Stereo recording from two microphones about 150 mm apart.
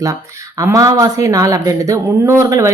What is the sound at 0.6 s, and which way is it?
Speech, 20° right (ahead or behind).